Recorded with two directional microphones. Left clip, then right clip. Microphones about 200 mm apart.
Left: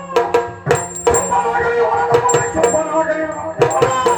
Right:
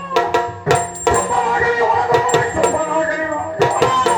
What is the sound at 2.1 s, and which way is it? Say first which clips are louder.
Music: left 1 dB; 5° right (ahead or behind).